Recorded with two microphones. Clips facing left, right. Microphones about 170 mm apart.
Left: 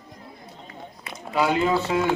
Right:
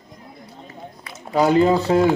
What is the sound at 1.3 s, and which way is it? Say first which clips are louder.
Speech: right 6 dB; 40° right (ahead or behind).